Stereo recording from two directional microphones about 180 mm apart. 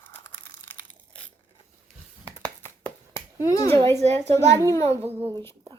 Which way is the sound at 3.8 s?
30° right (ahead or behind).